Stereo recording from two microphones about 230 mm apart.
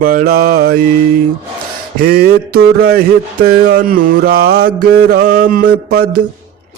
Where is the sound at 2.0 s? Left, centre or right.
Right.